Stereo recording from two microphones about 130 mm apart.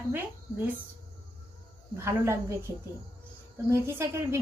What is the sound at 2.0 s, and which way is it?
Speech, 20° right (ahead or behind).